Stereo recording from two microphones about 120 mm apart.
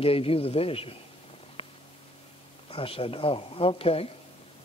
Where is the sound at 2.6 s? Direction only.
50° left (ahead or behind).